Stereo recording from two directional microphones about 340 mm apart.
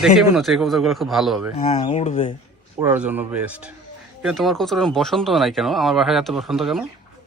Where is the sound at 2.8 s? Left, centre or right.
Centre.